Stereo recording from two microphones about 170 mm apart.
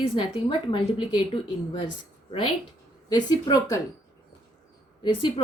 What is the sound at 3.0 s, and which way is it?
Speech, 20° left (ahead or behind).